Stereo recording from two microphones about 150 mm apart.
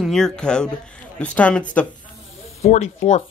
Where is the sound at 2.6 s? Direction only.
50° left (ahead or behind).